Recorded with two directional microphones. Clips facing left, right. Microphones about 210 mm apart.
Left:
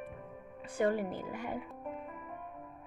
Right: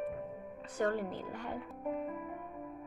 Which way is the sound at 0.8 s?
10° left (ahead or behind).